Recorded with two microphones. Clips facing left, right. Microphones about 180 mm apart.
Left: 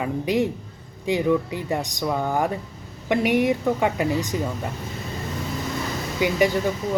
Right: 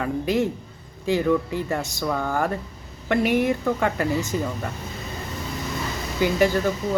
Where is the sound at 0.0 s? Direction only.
15° left (ahead or behind).